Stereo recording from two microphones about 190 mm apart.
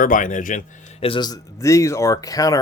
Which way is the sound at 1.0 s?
25° left (ahead or behind).